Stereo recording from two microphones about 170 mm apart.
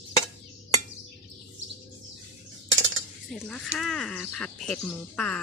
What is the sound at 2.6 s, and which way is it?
Cutlery, 90° right.